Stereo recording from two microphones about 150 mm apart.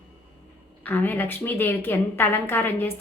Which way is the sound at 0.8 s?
10° left (ahead or behind).